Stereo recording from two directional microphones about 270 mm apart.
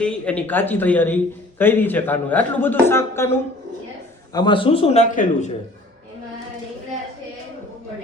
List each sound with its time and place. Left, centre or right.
0.0 s a man's voice: centre
4.4 s a man's voice: centre